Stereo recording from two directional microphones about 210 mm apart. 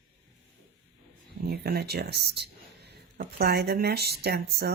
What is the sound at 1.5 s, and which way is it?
Speech, 50° right (ahead or behind).